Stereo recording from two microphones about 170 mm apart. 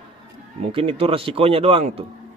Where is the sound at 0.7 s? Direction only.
30° right (ahead or behind).